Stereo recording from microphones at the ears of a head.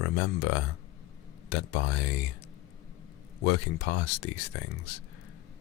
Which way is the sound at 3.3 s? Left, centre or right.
Left.